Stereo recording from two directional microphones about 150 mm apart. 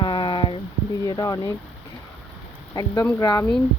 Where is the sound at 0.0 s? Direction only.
30° left (ahead or behind).